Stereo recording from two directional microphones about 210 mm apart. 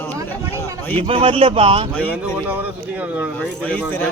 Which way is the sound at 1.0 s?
25° right (ahead or behind).